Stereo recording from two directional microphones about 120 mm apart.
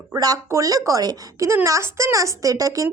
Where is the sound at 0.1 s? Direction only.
30° right (ahead or behind).